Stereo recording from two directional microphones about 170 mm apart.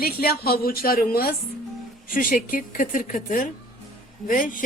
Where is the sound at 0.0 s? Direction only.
65° left (ahead or behind).